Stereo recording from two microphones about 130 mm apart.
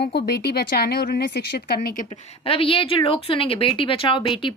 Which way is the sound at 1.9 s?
90° left.